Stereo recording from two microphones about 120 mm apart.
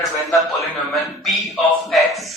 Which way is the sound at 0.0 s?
Centre (ahead or behind).